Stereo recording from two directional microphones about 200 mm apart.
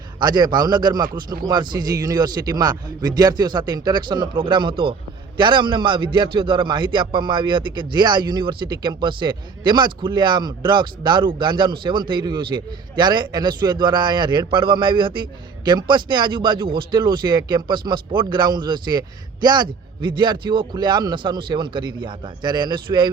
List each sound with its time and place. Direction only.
0.2 s a man's voice: 20° right (ahead or behind)